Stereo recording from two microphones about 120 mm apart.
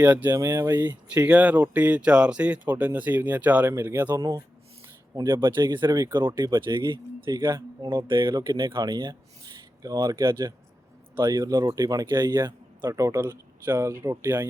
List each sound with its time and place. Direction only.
0.0 s speech: 15° right (ahead or behind)
0.3 s speech: 25° right (ahead or behind)
1.0 s speech: 10° right (ahead or behind); by 5.5 s 35° right (ahead or behind)
5.5 s speech: 20° right (ahead or behind)
5.7 s speech: 40° right (ahead or behind); by 14.4 s 20° right (ahead or behind)